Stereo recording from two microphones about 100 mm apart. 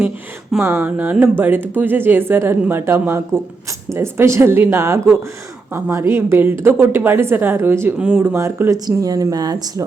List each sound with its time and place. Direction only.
0.6 s a woman's voice: 25° right (ahead or behind)
0.9 s a woman's voice: 15° right (ahead or behind)
7.9 s speech: 10° right (ahead or behind)
8.2 s speech: 25° right (ahead or behind); by 9.8 s 40° right (ahead or behind)